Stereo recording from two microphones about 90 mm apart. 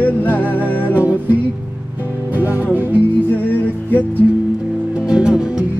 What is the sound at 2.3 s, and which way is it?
Music, 20° right (ahead or behind).